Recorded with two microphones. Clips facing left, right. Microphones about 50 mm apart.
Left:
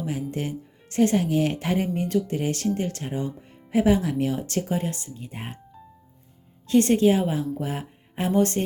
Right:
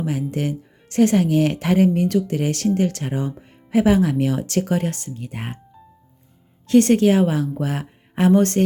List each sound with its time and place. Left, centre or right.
0.0 s speech: right
2.0 s speech: right
2.7 s speech: right
6.7 s a woman's voice: right
8.3 s music: right